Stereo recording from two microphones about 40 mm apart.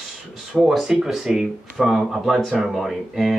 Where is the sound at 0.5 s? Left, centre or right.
Centre.